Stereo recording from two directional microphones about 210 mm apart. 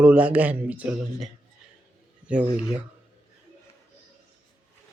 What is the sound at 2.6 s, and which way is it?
Speech, 5° right (ahead or behind).